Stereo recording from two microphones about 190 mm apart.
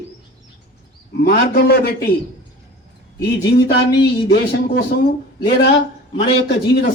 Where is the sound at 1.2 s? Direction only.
55° left (ahead or behind).